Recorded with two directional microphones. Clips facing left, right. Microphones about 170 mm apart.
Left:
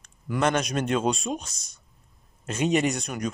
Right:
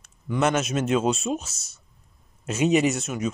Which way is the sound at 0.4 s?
5° right (ahead or behind).